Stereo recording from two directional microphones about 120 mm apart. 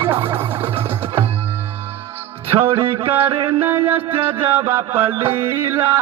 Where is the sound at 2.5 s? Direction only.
20° right (ahead or behind).